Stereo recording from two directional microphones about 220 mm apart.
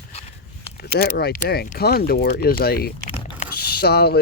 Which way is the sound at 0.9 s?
45° left (ahead or behind).